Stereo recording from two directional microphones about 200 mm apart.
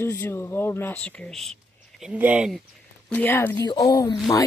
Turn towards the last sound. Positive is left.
turn(degrees=20)  # may be behind; listen again after turning